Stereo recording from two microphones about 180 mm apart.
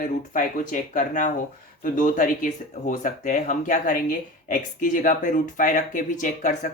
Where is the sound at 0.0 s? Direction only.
45° left (ahead or behind).